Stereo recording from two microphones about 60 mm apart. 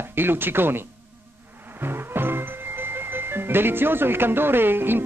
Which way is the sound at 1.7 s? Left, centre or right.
Right.